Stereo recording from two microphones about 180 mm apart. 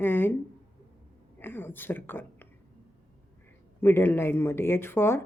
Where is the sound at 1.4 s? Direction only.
10° left (ahead or behind).